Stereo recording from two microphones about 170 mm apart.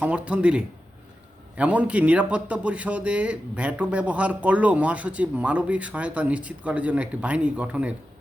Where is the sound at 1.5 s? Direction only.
5° right (ahead or behind).